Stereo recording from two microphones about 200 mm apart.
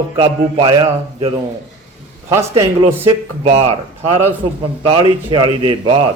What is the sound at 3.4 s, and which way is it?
A man's voice, 30° right (ahead or behind).